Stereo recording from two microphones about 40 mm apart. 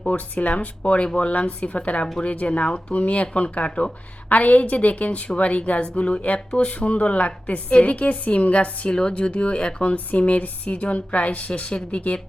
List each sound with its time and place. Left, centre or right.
0.0 s speech: left